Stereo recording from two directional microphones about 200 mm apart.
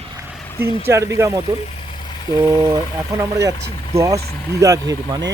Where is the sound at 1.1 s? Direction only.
15° right (ahead or behind).